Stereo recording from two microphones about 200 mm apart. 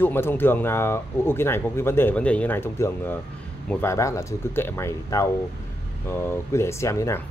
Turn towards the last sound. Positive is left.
turn(degrees=15)  # may be behind; listen again after turning